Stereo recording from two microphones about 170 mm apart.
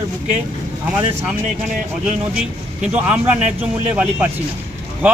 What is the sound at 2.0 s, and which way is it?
A man's voice, 5° right (ahead or behind).